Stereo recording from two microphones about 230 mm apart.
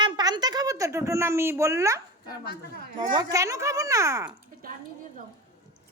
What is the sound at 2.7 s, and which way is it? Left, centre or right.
Speech, right.